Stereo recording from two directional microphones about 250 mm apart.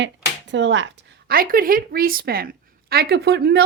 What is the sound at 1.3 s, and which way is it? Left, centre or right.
Speech, right.